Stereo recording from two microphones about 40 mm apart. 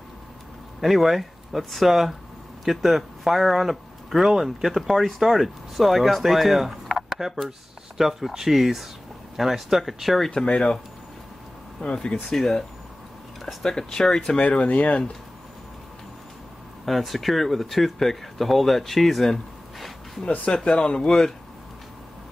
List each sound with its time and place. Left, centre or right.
0.7 s speech: centre
10.3 s speech: left
11.9 s speech: left
12.3 s speech: centre
13.7 s speech: centre
14.6 s speech: left
16.8 s speech: centre
20.2 s speech: left
20.5 s speech: left